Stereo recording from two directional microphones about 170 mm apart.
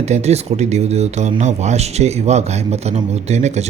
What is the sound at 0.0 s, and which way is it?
Speech, 40° right (ahead or behind).